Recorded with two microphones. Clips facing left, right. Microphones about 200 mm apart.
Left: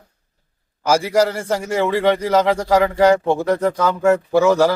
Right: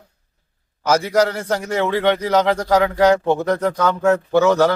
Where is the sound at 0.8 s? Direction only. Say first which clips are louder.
Even; 10° left (ahead or behind).